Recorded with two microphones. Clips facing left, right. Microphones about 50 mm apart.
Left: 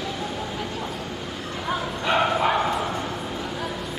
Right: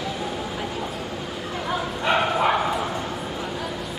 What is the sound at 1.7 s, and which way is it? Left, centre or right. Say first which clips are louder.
Bow-wow: right 1 dB; centre.